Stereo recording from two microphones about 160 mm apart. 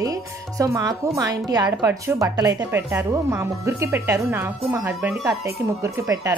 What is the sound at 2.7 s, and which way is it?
Speech, 15° right (ahead or behind).